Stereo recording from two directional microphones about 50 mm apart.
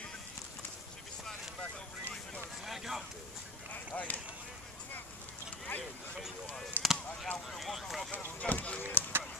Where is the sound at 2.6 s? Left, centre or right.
Centre.